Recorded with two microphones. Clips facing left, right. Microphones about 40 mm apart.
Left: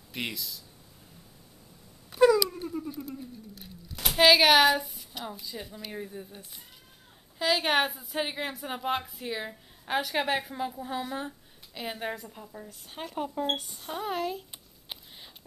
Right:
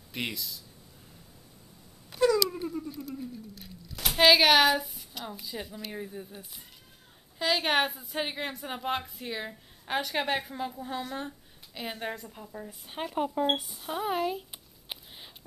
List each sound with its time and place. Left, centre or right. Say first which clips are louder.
0.1 s a woman's voice: even; centre
2.1 s a sound: left 3 dB; centre
3.2 s a woman's voice: right 3 dB; centre
12.6 s speech: right 5 dB; centre